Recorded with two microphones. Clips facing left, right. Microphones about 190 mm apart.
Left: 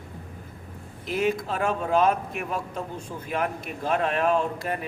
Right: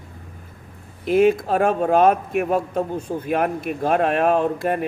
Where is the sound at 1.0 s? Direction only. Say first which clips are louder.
Right 9 dB; 50° right (ahead or behind).